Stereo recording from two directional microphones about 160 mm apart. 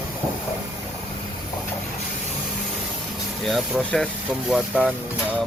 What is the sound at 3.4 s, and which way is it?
Speech, centre (ahead or behind).